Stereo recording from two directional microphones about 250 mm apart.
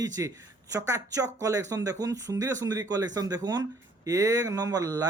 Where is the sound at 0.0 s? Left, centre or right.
Centre.